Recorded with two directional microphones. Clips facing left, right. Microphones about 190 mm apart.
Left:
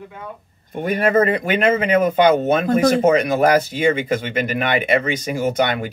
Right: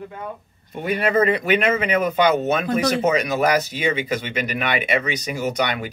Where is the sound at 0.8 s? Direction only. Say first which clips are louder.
Left 2 dB; 50° left (ahead or behind).